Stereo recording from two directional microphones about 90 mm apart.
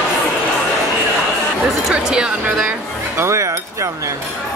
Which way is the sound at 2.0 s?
10° right (ahead or behind).